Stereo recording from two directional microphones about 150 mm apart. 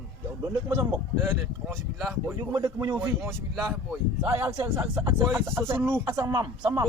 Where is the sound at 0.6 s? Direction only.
15° right (ahead or behind).